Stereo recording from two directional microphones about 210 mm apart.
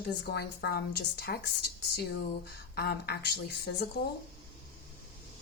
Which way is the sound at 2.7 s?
50° left (ahead or behind).